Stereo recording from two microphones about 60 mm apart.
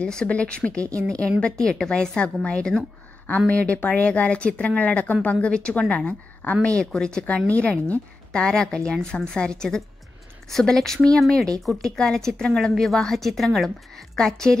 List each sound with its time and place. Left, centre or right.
0.0 s a woman's voice: centre